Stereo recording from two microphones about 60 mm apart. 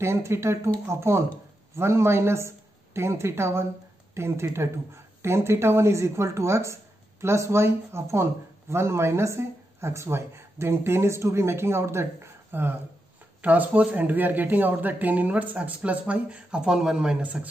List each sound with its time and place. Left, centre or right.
0.0 s speech: right
13.4 s speech: right